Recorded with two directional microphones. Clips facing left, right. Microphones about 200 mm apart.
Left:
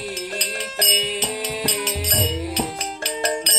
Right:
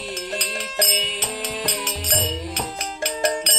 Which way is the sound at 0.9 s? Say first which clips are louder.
Left 3 dB; 10° left (ahead or behind).